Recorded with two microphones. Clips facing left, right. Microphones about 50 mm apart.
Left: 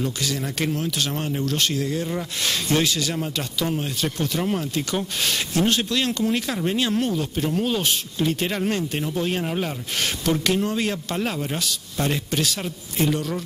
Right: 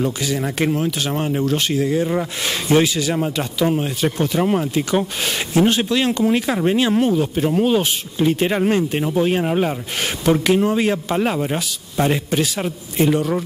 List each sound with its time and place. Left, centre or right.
0.0 s speech: centre